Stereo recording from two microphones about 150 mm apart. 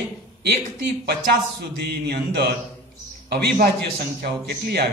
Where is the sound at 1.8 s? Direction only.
90° right.